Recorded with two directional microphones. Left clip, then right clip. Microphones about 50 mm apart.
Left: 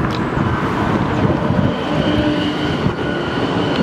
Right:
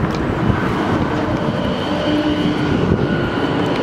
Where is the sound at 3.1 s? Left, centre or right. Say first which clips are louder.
Even; left.